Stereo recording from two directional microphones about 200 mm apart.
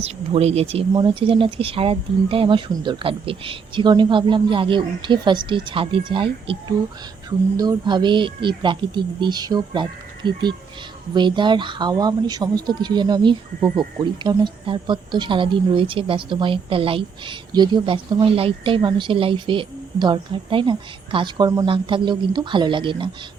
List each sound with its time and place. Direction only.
0.0 s speech: 30° right (ahead or behind)